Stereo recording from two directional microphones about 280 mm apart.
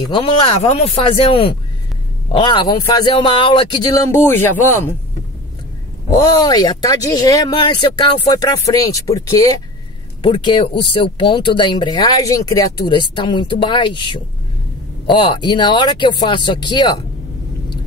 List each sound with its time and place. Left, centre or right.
0.1 s speech: centre
6.0 s speech: centre